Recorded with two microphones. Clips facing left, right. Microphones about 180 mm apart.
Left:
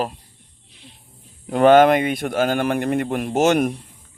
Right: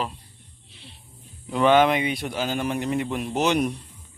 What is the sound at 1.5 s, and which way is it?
Speech, 50° left (ahead or behind).